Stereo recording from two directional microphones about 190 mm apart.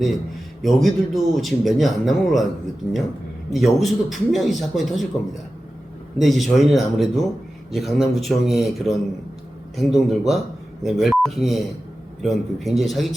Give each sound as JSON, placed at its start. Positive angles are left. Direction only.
{"t": 0.6, "sound": "speech", "side_deg": 0}
{"t": 3.5, "sound": "speech", "side_deg": 0}
{"t": 6.1, "sound": "speech", "side_deg": 0}